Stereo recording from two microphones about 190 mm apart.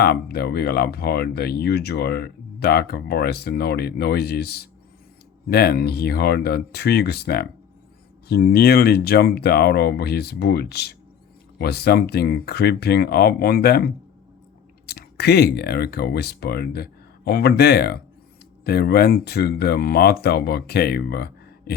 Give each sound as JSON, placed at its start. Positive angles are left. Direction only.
{"t": 0.0, "sound": "speech", "side_deg": 55}